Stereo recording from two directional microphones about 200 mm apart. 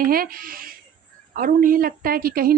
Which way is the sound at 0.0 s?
45° right (ahead or behind).